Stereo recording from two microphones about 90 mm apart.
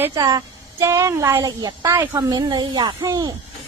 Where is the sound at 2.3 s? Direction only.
50° right (ahead or behind).